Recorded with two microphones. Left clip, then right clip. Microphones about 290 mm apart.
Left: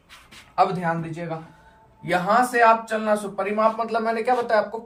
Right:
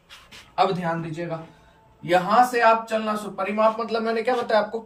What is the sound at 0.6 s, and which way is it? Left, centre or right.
Speech, centre.